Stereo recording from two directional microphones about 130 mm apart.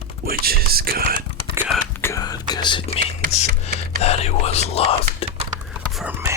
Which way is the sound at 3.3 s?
55° left (ahead or behind).